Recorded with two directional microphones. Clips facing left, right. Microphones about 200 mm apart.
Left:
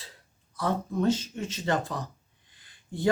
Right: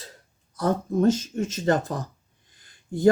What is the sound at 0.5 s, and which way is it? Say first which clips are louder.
Speech: right 5 dB; 45° right (ahead or behind).